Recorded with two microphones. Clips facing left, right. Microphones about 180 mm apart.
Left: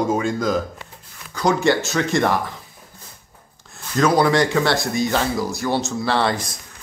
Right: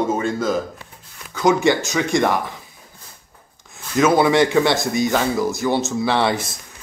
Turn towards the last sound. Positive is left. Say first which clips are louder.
# right 2 dB
turn(degrees=-20)  # may be behind; listen again after turning